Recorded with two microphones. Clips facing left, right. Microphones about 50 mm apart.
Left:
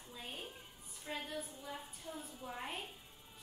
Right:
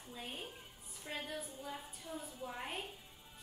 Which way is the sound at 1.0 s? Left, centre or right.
Centre.